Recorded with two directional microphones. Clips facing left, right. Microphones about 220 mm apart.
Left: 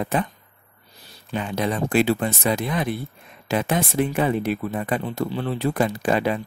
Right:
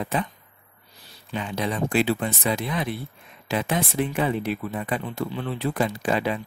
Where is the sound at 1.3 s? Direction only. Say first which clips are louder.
Left 3 dB; 50° left (ahead or behind).